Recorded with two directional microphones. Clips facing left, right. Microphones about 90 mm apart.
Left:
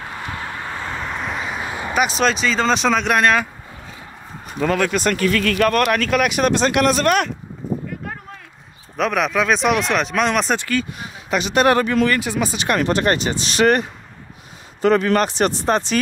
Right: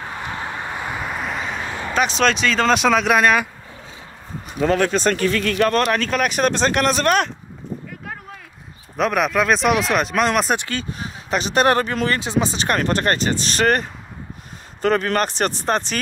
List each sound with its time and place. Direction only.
0.2 s a sound: 20° right (ahead or behind); by 3.4 s 5° right (ahead or behind)
4.6 s speech: 35° right (ahead or behind)
8.9 s speech: centre (ahead or behind)
10.7 s speech: 35° right (ahead or behind)
12.2 s speech: 25° right (ahead or behind)
12.6 s speech: 40° right (ahead or behind)